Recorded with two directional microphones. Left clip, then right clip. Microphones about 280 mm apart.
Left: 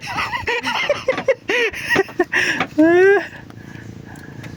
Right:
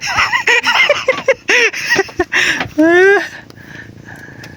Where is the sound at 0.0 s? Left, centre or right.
Centre.